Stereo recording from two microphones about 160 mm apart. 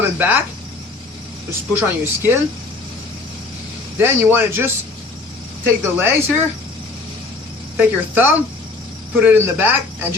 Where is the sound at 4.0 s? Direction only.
15° right (ahead or behind).